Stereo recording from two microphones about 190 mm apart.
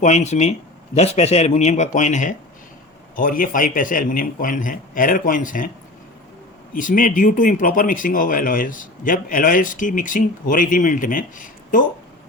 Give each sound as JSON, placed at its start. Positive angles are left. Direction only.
{"t": 0.0, "sound": "a man's voice", "side_deg": 40}
{"t": 6.7, "sound": "a man's voice", "side_deg": 45}